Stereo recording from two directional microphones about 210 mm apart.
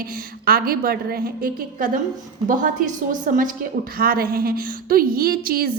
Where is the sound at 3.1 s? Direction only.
40° right (ahead or behind).